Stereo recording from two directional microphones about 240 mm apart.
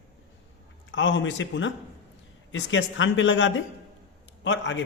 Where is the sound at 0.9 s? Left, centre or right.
Left.